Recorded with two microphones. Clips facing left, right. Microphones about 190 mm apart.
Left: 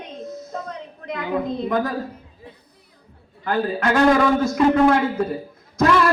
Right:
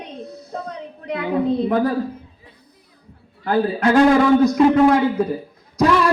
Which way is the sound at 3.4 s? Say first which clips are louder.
Right 4 dB; 35° right (ahead or behind).